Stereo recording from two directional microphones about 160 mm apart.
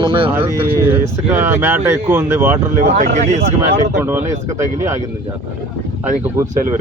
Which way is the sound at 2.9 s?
50° right (ahead or behind).